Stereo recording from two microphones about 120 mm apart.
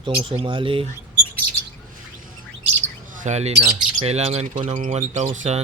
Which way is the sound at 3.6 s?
60° right (ahead or behind).